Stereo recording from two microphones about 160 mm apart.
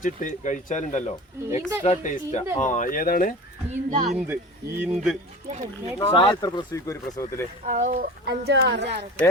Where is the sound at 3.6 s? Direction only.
45° right (ahead or behind).